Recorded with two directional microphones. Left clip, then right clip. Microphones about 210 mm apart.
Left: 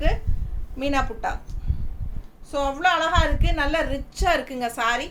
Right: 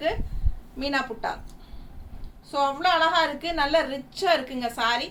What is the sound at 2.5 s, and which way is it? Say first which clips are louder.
A woman's voice: left 1 dB; 15° left (ahead or behind).